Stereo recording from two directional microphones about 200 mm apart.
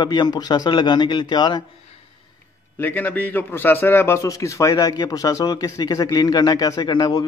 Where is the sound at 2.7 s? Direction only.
10° left (ahead or behind).